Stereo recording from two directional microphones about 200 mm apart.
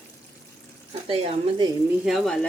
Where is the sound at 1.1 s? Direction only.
30° right (ahead or behind).